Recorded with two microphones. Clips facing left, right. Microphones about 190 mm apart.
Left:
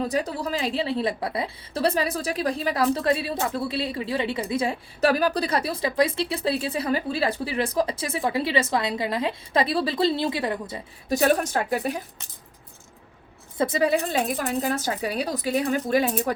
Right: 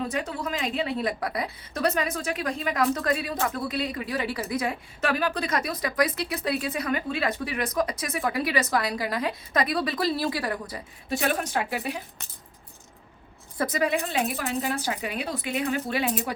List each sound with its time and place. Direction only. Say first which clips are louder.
0.1 s a woman's voice: left 4 dB; 35° left (ahead or behind)
11.1 s speech: left 5 dB; 40° left (ahead or behind)
13.6 s a woman's voice: left 4 dB; 30° left (ahead or behind)
14.0 s speech: left 3 dB; 40° left (ahead or behind)